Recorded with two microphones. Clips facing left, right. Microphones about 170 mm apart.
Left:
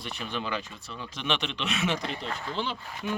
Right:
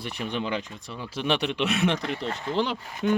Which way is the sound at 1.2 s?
40° right (ahead or behind).